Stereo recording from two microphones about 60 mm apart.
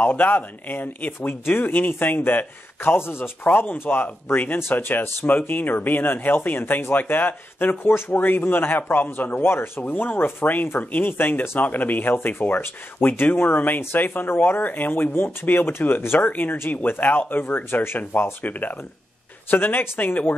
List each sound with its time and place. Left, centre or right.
0.0 s speech: left